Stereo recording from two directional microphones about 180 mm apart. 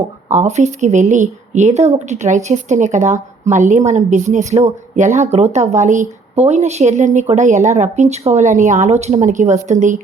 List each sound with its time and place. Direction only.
0.3 s speech: 40° right (ahead or behind)